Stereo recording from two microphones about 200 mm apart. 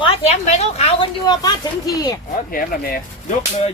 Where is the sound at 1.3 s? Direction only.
20° left (ahead or behind).